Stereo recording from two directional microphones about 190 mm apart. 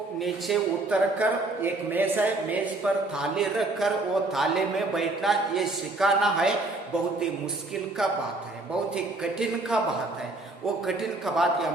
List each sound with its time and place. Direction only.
0.2 s a man's voice: centre (ahead or behind)
9.4 s a man's voice: centre (ahead or behind)
10.8 s a man's voice: centre (ahead or behind)